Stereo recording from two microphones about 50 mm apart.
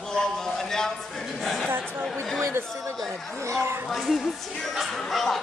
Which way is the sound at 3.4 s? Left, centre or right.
Right.